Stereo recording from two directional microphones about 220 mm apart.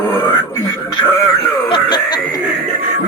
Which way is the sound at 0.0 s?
15° left (ahead or behind).